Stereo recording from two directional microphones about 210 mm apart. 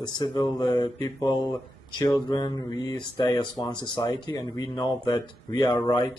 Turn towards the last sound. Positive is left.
turn(degrees=20)  # may be behind; listen again after turning